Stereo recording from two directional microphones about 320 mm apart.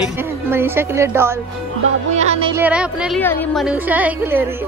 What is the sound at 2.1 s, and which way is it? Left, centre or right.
Music, right.